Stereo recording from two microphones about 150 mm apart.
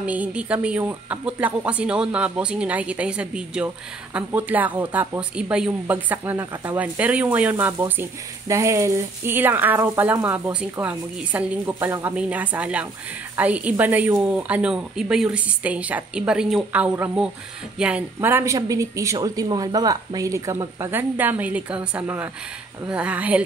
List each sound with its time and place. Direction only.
0.0 s speech: 10° right (ahead or behind)